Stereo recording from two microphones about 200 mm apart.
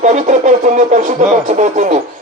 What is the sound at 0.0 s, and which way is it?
Speech, 35° right (ahead or behind).